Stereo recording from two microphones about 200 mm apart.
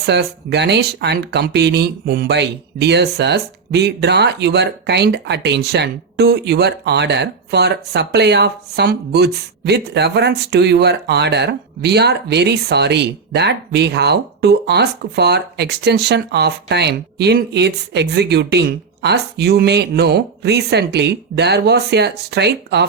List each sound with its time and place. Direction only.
0.0 s speech: 55° right (ahead or behind)